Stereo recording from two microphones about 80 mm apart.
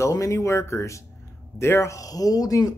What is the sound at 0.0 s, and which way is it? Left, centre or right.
Speech, left.